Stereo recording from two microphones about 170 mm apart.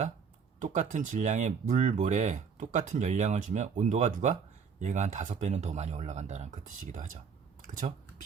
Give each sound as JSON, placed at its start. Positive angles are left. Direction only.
{"t": 0.6, "sound": "speech", "side_deg": -45}